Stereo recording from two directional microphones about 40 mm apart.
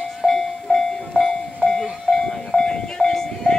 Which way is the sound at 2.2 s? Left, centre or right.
Centre.